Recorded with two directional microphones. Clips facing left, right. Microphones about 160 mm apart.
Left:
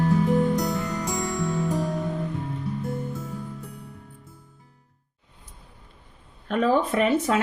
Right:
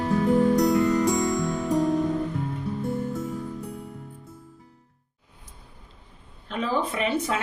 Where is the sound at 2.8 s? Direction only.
Centre (ahead or behind).